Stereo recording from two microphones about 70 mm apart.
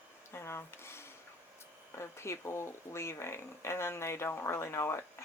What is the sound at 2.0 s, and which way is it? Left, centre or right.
Speech, left.